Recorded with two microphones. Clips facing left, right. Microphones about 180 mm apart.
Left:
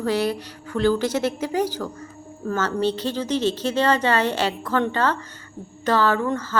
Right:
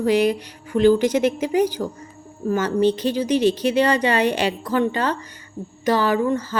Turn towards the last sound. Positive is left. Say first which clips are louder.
# right 2 dB
turn(degrees=-10)  # may be behind; listen again after turning